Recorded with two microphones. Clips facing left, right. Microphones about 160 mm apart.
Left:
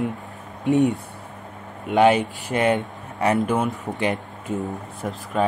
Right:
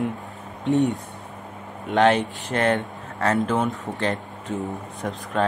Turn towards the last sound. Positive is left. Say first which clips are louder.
# even
turn(degrees=0)  # may be behind; listen again after turning